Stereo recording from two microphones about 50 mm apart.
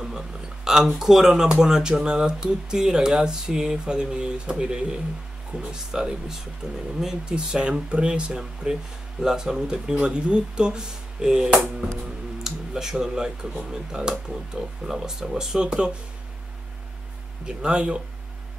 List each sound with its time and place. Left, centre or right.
0.9 s speech: centre
17.5 s speech: centre